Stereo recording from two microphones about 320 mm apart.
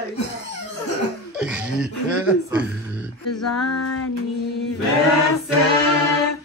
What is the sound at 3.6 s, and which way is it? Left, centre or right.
Child singing, left.